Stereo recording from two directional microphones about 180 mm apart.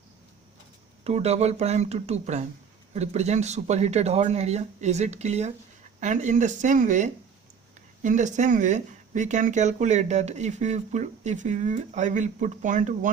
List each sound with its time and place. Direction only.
1.0 s speech: 35° right (ahead or behind)